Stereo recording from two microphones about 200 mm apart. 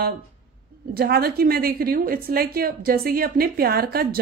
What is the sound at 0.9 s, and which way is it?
A woman's voice, 50° right (ahead or behind).